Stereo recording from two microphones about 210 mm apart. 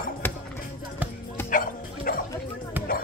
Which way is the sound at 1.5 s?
40° left (ahead or behind).